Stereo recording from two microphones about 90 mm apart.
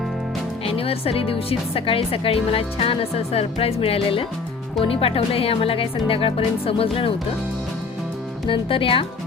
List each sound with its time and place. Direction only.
0.6 s speech: 90° left
8.4 s speech: 80° left